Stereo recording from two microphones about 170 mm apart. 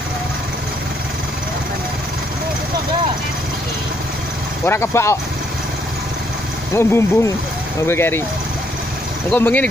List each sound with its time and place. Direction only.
4.6 s speech: 15° left (ahead or behind)
6.7 s speech: 15° left (ahead or behind)
9.3 s speech: 10° left (ahead or behind)